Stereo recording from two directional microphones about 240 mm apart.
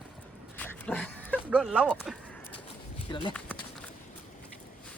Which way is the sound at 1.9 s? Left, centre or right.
Centre.